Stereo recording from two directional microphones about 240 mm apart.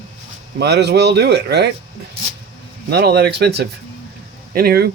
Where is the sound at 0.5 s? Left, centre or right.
Right.